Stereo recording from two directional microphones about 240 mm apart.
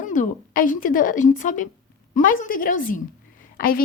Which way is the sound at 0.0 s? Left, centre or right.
Left.